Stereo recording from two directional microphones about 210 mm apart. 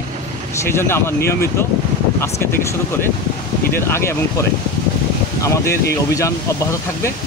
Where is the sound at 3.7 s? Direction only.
10° left (ahead or behind).